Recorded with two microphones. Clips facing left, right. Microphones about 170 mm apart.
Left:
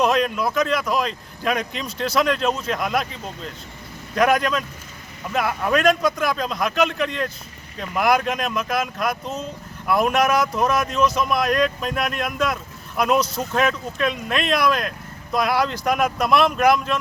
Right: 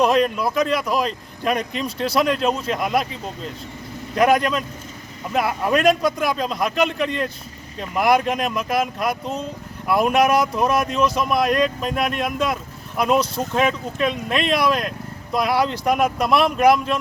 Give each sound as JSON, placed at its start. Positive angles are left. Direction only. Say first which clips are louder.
{"t": 0.0, "sound": "speech", "louder": "right 2 dB", "side_deg": 0}
{"t": 13.1, "sound": "speech", "louder": "right 1 dB", "side_deg": -30}
{"t": 13.5, "sound": "speech", "louder": "right 1 dB", "side_deg": 0}